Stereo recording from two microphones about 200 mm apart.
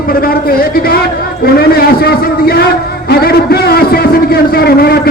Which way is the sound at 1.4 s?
50° left (ahead or behind).